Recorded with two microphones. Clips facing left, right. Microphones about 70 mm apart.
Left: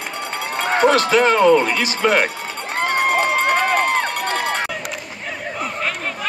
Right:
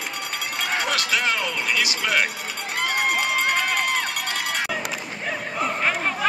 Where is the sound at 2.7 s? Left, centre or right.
Left.